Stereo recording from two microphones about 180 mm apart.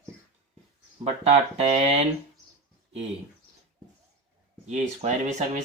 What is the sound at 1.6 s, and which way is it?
Speech, 35° right (ahead or behind).